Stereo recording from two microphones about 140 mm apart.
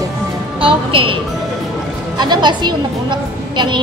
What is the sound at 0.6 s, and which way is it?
Speech, 40° right (ahead or behind).